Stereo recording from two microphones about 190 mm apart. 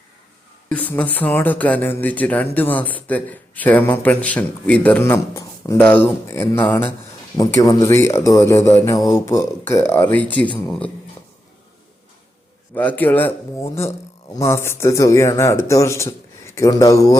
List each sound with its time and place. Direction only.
0.7 s a man's voice: 5° left (ahead or behind)
12.7 s speech: 10° left (ahead or behind)